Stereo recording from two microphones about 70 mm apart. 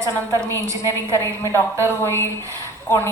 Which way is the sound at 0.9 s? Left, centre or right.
Left.